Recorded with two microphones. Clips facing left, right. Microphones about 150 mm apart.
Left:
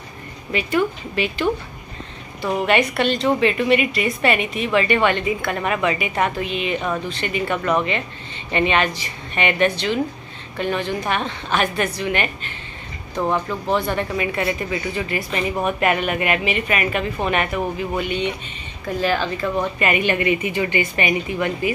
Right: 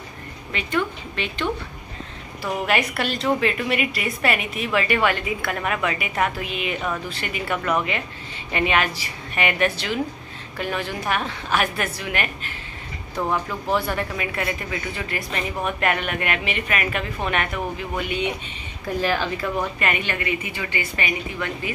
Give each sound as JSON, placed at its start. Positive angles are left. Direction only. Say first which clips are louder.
{"t": 0.5, "sound": "speech", "louder": "left 5 dB", "side_deg": 5}
{"t": 2.4, "sound": "speech", "louder": "left 4 dB", "side_deg": 0}
{"t": 19.9, "sound": "a woman's voice", "louder": "left 6 dB", "side_deg": 15}